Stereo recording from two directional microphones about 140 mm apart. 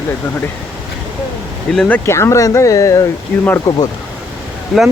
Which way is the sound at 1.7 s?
5° left (ahead or behind).